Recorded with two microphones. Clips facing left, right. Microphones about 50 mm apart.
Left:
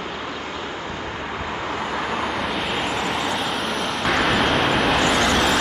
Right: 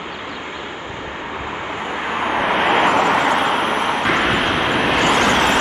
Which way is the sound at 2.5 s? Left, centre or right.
Right.